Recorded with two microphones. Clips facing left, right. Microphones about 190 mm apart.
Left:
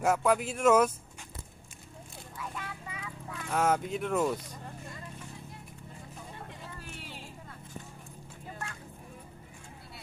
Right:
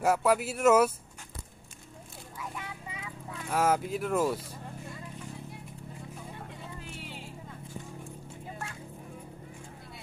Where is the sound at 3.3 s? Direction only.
5° right (ahead or behind).